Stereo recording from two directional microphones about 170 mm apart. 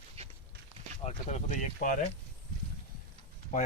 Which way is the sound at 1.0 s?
45° left (ahead or behind).